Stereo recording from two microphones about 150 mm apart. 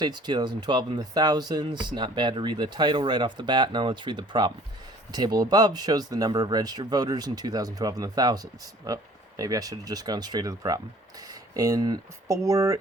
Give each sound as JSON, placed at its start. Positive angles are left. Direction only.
{"t": 0.0, "sound": "speech", "side_deg": -30}